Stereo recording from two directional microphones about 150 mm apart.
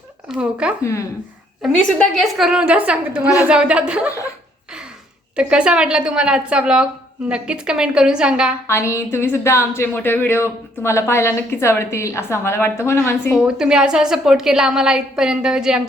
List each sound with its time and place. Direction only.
0.3 s speech: 5° right (ahead or behind)
0.8 s speech: 20° left (ahead or behind)
1.6 s a woman's voice: 5° left (ahead or behind)
5.4 s a woman's voice: 5° right (ahead or behind)
8.6 s a woman's voice: 20° left (ahead or behind)
13.4 s a woman's voice: 5° right (ahead or behind)